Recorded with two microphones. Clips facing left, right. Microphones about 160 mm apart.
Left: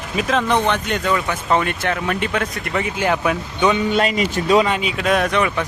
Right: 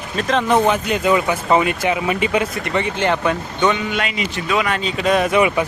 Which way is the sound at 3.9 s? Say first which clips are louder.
Left 5 dB; 40° left (ahead or behind).